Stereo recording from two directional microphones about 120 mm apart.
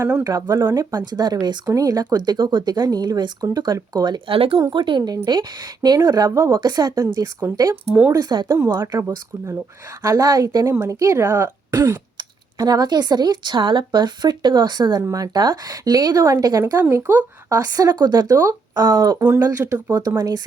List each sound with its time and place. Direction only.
0.3 s speech: 35° right (ahead or behind)
6.3 s speech: 20° right (ahead or behind)
6.6 s speech: 35° right (ahead or behind)
8.9 s speech: 25° right (ahead or behind)
17.0 s speech: 20° right (ahead or behind)
17.5 s speech: 30° right (ahead or behind)